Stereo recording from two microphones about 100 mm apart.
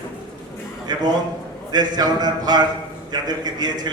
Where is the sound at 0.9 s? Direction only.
45° right (ahead or behind).